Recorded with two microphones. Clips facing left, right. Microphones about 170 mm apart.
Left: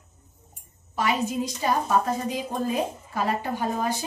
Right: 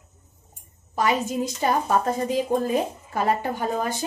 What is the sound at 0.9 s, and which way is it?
A woman's voice, 45° right (ahead or behind).